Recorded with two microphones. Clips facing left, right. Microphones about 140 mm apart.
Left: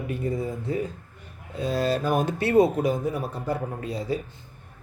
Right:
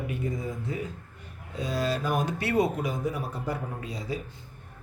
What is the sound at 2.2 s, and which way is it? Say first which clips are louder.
Speech: left 8 dB; 25° left (ahead or behind).